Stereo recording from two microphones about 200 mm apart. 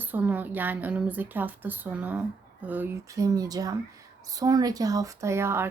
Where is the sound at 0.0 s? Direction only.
10° right (ahead or behind).